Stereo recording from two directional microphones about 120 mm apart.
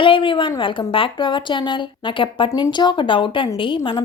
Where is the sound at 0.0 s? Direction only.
45° left (ahead or behind).